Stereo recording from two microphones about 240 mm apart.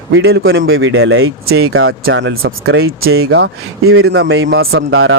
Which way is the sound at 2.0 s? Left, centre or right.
Right.